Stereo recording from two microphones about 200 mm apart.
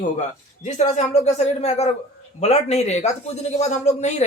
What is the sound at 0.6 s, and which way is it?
Speech, 35° left (ahead or behind).